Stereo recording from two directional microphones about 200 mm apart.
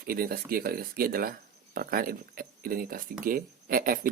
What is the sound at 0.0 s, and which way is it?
Speech, 50° right (ahead or behind).